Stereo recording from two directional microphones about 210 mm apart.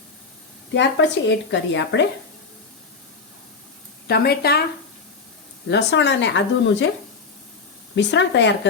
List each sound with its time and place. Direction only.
0.7 s a woman's voice: 60° left (ahead or behind)
4.0 s speech: 50° left (ahead or behind)
5.7 s a woman's voice: 55° left (ahead or behind)
7.9 s a woman's voice: 55° left (ahead or behind)